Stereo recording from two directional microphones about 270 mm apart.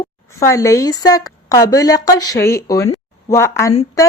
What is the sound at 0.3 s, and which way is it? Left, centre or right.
Speech, centre.